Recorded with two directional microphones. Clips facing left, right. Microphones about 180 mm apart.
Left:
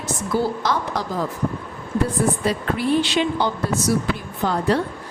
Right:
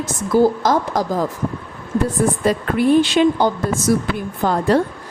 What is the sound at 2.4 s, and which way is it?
Speech, 50° right (ahead or behind).